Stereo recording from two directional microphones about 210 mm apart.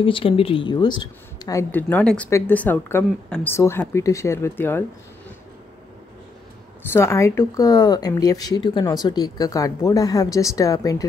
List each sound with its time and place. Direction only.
0.0 s speech: 25° left (ahead or behind)
6.9 s speech: 10° left (ahead or behind)